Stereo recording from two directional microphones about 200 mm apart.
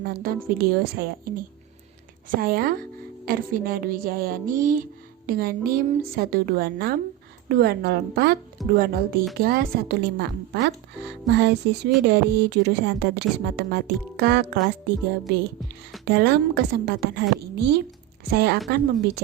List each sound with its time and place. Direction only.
0.0 s a woman's voice: 50° right (ahead or behind)
16.0 s a woman's voice: 55° right (ahead or behind)